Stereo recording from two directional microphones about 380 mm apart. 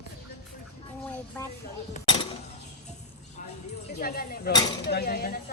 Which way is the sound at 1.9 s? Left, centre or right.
Centre.